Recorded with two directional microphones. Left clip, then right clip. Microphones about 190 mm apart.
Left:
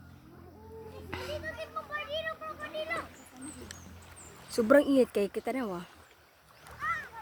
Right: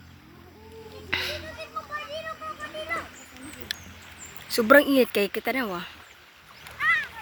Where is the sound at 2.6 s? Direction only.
40° right (ahead or behind).